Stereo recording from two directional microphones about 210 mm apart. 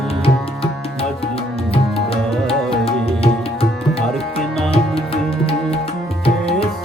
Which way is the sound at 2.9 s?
25° left (ahead or behind).